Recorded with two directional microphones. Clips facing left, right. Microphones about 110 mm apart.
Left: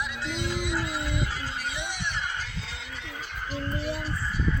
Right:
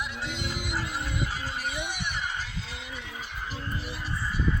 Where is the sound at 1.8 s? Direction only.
15° right (ahead or behind).